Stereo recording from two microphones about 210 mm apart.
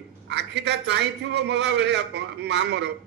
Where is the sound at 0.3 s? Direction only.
55° right (ahead or behind).